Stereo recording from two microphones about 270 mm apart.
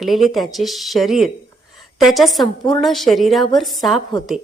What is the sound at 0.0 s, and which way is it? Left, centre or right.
A woman's voice, centre.